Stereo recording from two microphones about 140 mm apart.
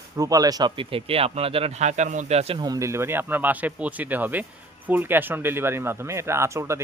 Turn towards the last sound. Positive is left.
turn(degrees=-20)  # may be behind; listen again after turning